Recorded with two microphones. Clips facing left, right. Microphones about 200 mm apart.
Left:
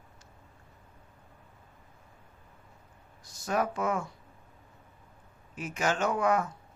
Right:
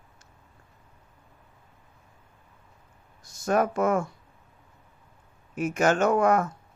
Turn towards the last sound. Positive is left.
turn(degrees=-45)  # may be behind; listen again after turning